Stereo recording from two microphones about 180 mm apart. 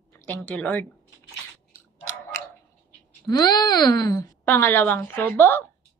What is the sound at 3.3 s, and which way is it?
Speech, 20° left (ahead or behind).